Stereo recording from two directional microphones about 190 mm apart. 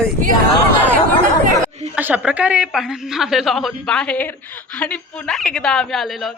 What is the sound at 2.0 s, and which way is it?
A woman's voice, 10° right (ahead or behind).